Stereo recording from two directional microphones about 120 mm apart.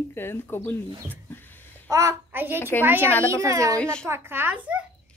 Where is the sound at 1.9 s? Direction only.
25° right (ahead or behind).